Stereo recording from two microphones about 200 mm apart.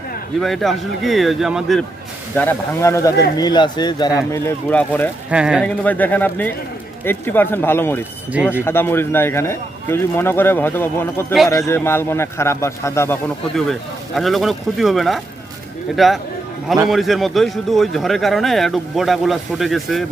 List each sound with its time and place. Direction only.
0.3 s speech: centre (ahead or behind)
2.3 s a man's voice: 10° left (ahead or behind)
4.3 s a man's voice: 10° left (ahead or behind)
5.3 s speech: 5° right (ahead or behind)
5.6 s a man's voice: 10° left (ahead or behind)
14.2 s speech: centre (ahead or behind)